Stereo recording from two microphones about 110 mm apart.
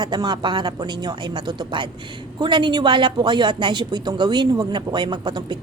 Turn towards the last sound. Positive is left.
turn(degrees=-45)  # may be behind; listen again after turning